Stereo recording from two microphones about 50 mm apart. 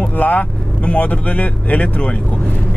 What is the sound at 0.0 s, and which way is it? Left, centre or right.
Speech, left.